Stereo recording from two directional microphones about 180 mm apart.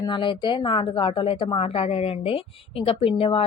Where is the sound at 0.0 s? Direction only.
25° left (ahead or behind).